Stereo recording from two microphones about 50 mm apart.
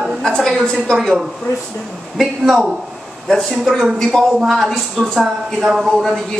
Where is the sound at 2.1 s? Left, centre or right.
Centre.